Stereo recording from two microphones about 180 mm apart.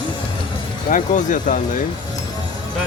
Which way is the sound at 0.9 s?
45° left (ahead or behind).